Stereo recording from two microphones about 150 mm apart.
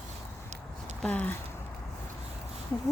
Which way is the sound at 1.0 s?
10° left (ahead or behind).